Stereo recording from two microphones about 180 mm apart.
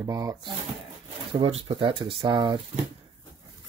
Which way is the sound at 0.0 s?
20° right (ahead or behind).